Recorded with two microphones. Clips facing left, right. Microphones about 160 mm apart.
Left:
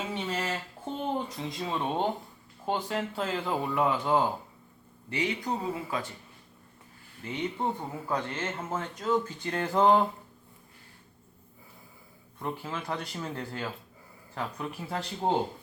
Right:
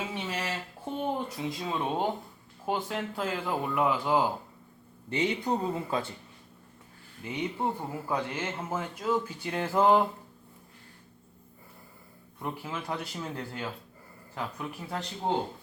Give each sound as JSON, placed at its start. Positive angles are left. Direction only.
{"t": 0.3, "sound": "a sound", "side_deg": -10}
{"t": 1.0, "sound": "speech", "side_deg": -5}
{"t": 5.1, "sound": "speech", "side_deg": -25}
{"t": 7.3, "sound": "speech", "side_deg": -10}
{"t": 12.4, "sound": "speech", "side_deg": -5}